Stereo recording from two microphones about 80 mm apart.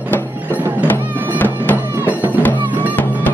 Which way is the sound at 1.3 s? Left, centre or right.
Left.